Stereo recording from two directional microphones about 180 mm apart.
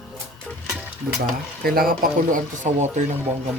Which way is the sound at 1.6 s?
55° right (ahead or behind).